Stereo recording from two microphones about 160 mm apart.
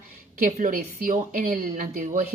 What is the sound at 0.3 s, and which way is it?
A woman's voice, 55° right (ahead or behind).